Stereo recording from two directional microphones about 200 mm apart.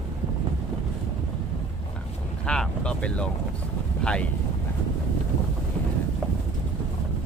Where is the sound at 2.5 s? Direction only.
5° left (ahead or behind).